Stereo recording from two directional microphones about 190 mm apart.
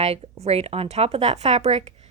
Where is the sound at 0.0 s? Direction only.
35° right (ahead or behind).